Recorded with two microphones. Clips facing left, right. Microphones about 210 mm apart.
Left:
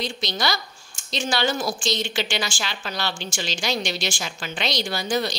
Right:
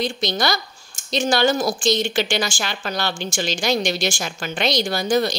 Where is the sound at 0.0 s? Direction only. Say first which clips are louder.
Right 5 dB; 50° right (ahead or behind).